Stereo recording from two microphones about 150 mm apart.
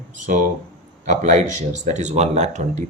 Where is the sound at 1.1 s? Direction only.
50° right (ahead or behind).